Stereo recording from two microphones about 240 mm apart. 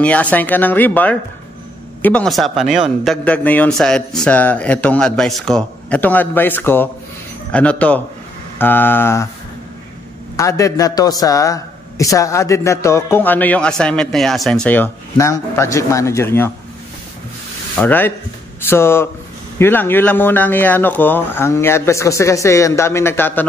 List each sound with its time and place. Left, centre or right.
0.0 s a man's voice: centre
10.3 s a man's voice: centre
17.7 s a man's voice: centre